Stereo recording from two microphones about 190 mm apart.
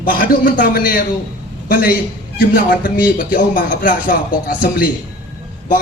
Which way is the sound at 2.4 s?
45° left (ahead or behind).